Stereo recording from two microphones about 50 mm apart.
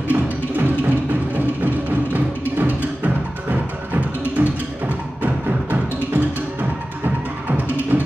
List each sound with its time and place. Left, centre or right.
0.1 s music: right
7.5 s music: right